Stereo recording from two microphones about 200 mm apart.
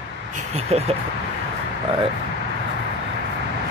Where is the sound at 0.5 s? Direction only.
30° right (ahead or behind).